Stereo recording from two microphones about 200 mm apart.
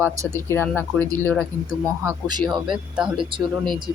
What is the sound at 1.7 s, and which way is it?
Speech, 15° right (ahead or behind).